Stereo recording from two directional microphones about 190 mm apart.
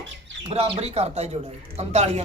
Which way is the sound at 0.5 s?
35° right (ahead or behind).